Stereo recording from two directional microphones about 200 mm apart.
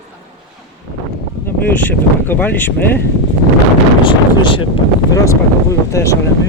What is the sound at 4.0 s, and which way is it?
Speech, 25° left (ahead or behind).